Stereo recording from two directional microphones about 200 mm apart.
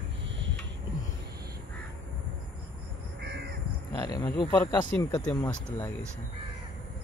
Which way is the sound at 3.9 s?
20° left (ahead or behind).